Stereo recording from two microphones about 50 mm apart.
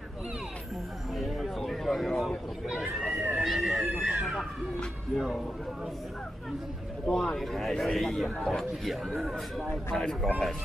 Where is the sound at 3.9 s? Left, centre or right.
Right.